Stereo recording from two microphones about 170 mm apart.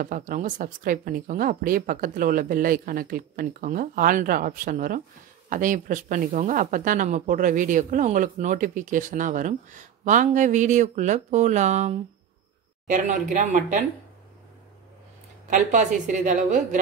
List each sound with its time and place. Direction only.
0.0 s speech: 55° right (ahead or behind)
15.5 s speech: 50° right (ahead or behind)